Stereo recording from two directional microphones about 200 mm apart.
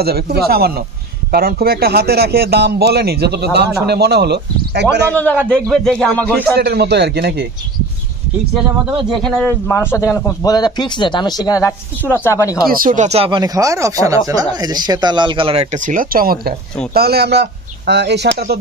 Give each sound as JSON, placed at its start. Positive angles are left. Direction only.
{"t": 0.0, "sound": "a man's voice", "side_deg": -50}
{"t": 5.1, "sound": "speech", "side_deg": 10}
{"t": 6.5, "sound": "speech", "side_deg": -55}
{"t": 9.2, "sound": "speech", "side_deg": 10}
{"t": 12.6, "sound": "speech", "side_deg": -40}